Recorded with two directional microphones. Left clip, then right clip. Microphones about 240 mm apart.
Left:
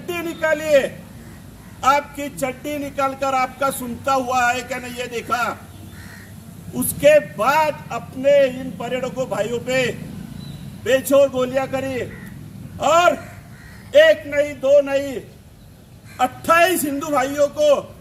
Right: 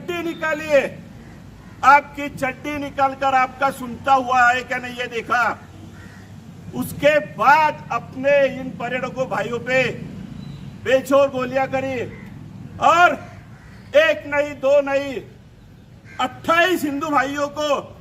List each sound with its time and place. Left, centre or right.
0.1 s a man's voice: centre
6.7 s speech: centre
16.1 s speech: centre